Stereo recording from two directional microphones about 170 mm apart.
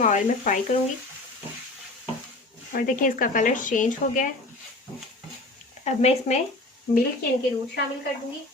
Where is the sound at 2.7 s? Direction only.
55° left (ahead or behind).